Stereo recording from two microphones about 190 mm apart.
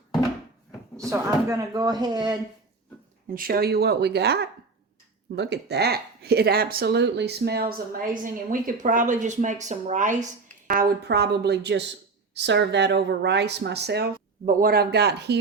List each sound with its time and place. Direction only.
0.9 s speech: 15° right (ahead or behind)
3.3 s speech: 50° right (ahead or behind)